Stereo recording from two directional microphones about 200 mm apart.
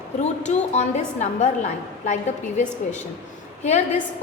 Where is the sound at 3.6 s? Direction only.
35° left (ahead or behind).